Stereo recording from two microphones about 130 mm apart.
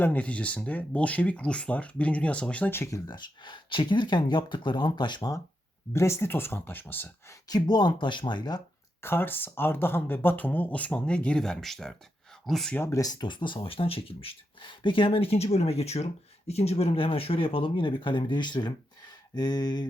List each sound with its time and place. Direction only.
0.0 s speech: 10° left (ahead or behind)
3.1 s speech: 35° left (ahead or behind)
5.9 s speech: 20° left (ahead or behind)
7.4 s speech: 30° left (ahead or behind)
9.0 s speech: 15° left (ahead or behind)
12.8 s speech: 25° left (ahead or behind)